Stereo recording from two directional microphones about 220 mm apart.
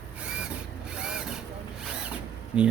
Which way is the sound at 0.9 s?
5° right (ahead or behind).